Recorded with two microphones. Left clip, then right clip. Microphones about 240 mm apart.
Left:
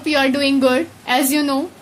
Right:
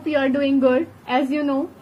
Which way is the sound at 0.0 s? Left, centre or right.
Left.